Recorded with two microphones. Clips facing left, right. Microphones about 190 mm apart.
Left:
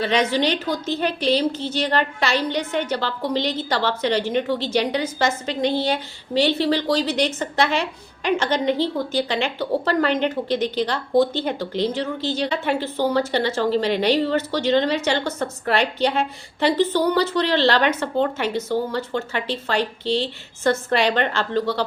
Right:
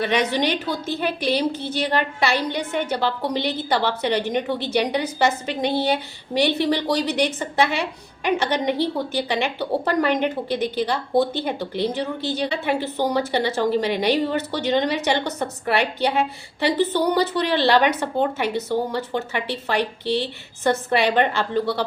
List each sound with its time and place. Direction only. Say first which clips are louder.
0.0 s a woman's voice: left 1 dB; 15° right (ahead or behind)